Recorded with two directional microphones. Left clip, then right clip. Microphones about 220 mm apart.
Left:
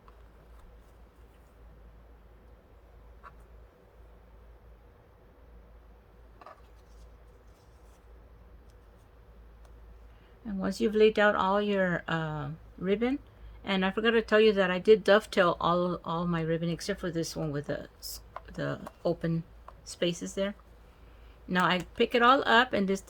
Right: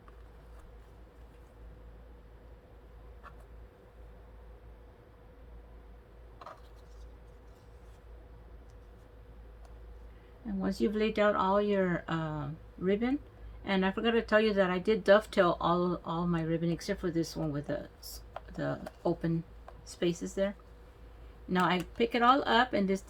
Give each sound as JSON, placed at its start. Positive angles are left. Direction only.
{"t": 10.6, "sound": "speech", "side_deg": 45}
{"t": 21.5, "sound": "speech", "side_deg": 45}